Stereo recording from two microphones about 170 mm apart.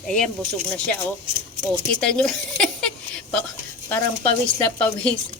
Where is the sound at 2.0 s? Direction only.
5° left (ahead or behind).